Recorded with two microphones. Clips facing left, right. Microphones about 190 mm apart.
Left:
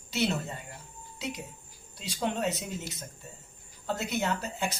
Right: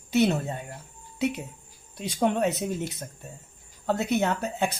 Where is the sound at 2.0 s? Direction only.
55° right (ahead or behind).